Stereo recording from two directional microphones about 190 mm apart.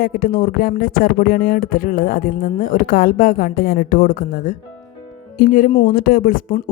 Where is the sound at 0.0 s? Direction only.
50° left (ahead or behind).